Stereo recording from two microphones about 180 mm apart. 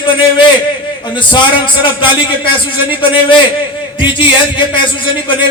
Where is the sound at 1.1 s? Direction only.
25° left (ahead or behind).